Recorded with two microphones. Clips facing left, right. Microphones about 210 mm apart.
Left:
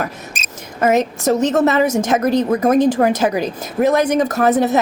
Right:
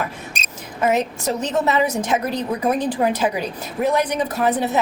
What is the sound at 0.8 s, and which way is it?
A woman's voice, 45° left (ahead or behind).